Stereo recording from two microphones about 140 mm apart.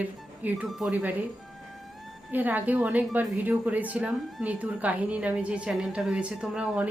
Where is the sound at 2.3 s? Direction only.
10° right (ahead or behind).